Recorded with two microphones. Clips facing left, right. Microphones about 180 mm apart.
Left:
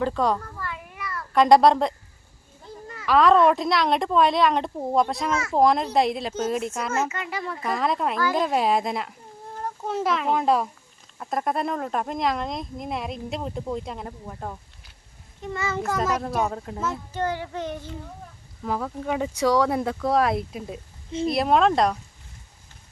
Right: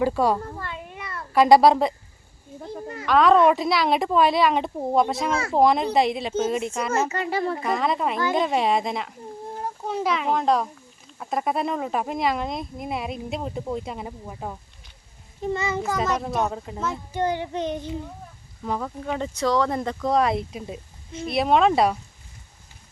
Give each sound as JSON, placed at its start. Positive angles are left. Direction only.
{"t": 0.0, "sound": "a child's voice", "side_deg": -10}
{"t": 0.3, "sound": "a sound", "side_deg": -25}
{"t": 1.3, "sound": "speech", "side_deg": -5}
{"t": 2.6, "sound": "children playing", "side_deg": -55}
{"t": 3.1, "sound": "speech", "side_deg": 0}
{"t": 5.3, "sound": "speech", "side_deg": -30}
{"t": 5.5, "sound": "speech", "side_deg": 0}
{"t": 7.1, "sound": "speech", "side_deg": -30}
{"t": 7.6, "sound": "speech", "side_deg": 0}
{"t": 15.5, "sound": "a child's voice", "side_deg": -20}
{"t": 15.8, "sound": "speech", "side_deg": 0}
{"t": 17.1, "sound": "child singing", "side_deg": -15}
{"t": 18.6, "sound": "speech", "side_deg": 0}